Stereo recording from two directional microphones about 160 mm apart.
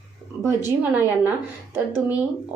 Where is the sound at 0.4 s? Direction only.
15° right (ahead or behind).